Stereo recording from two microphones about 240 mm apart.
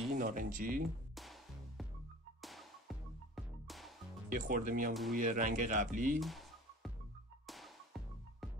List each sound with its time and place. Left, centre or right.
0.1 s speech: right
1.1 s music: centre
4.3 s speech: right
6.1 s a sound: centre
7.4 s music: centre